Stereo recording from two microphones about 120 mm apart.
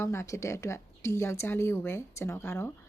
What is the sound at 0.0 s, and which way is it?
Speech, 20° left (ahead or behind).